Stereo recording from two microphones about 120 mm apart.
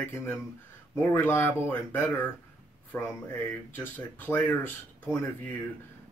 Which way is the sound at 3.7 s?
20° left (ahead or behind).